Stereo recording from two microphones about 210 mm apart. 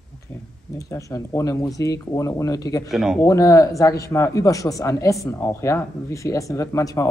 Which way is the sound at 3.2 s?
15° left (ahead or behind).